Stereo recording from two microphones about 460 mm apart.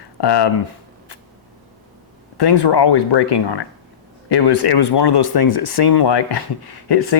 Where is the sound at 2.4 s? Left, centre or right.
Left.